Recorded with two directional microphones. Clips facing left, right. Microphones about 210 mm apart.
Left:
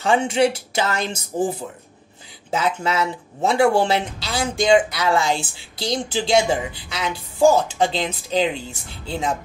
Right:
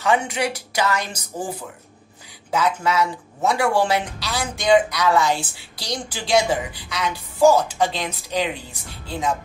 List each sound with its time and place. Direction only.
0.0 s speech: 25° left (ahead or behind)